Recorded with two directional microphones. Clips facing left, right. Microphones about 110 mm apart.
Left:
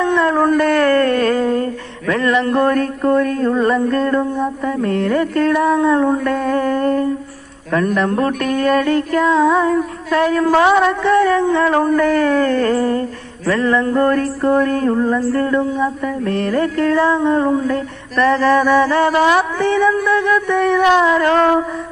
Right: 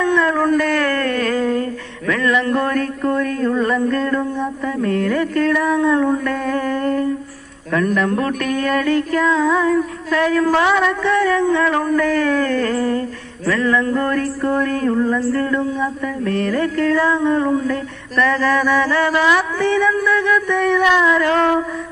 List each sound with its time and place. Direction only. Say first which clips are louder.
0.0 s howl: left 2 dB; 35° left (ahead or behind)
2.0 s mantra: left 2 dB; 35° left (ahead or behind)